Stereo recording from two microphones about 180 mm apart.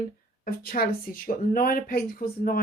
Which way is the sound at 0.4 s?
55° left (ahead or behind).